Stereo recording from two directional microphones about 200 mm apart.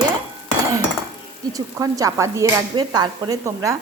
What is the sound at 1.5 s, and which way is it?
Speech, 15° right (ahead or behind).